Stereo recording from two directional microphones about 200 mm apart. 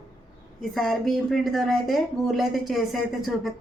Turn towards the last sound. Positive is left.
turn(degrees=0)  # may be behind; listen again after turning